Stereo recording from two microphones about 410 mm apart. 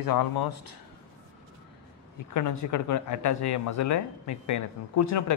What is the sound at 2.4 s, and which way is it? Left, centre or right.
Speech, left.